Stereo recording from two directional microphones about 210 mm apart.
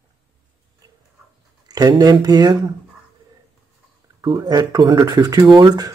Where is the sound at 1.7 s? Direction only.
20° right (ahead or behind).